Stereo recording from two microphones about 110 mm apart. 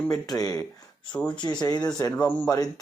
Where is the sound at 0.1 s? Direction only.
35° left (ahead or behind).